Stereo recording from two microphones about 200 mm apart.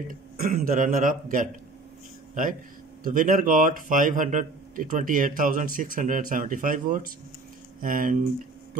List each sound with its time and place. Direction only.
0.1 s speech: 45° right (ahead or behind)
3.0 s speech: 45° right (ahead or behind)